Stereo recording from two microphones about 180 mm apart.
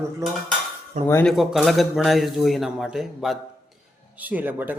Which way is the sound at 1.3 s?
Centre (ahead or behind).